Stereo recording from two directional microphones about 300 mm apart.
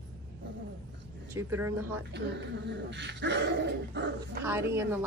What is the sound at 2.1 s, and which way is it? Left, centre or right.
Speech, right.